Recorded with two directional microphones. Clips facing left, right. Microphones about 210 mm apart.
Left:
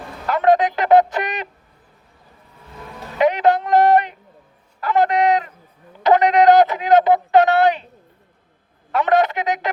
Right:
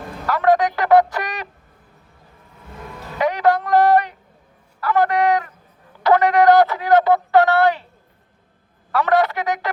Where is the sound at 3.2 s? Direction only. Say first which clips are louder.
Left 2 dB; 20° left (ahead or behind).